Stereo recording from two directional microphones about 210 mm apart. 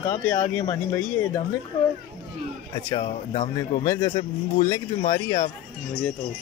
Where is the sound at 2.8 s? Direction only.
20° left (ahead or behind).